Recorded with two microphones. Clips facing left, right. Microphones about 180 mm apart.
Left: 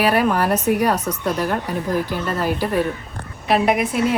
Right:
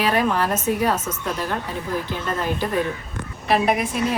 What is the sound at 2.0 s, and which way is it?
Speech, 10° left (ahead or behind).